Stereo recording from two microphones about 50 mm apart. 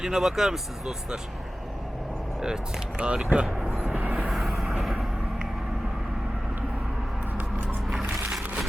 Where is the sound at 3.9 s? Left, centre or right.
Right.